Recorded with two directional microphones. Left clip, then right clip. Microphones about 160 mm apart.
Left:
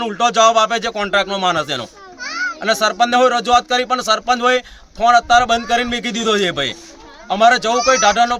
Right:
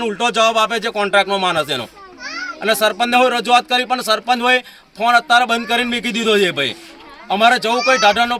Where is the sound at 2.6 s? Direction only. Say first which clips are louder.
Even; 10° left (ahead or behind).